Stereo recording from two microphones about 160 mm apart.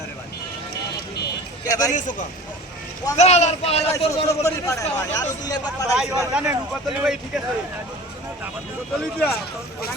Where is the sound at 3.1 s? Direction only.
45° left (ahead or behind).